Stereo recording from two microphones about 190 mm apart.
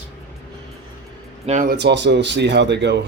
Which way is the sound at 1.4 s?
45° right (ahead or behind).